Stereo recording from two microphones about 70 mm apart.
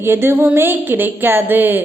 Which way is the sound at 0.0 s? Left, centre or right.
Right.